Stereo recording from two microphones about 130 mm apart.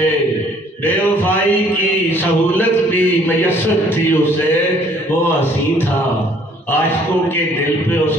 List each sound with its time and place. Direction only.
2.0 s a man's voice: 15° left (ahead or behind)